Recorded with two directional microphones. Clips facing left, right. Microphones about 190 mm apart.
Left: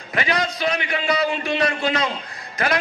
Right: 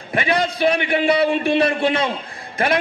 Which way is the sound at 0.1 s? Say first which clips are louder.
Right 3 dB; 30° right (ahead or behind).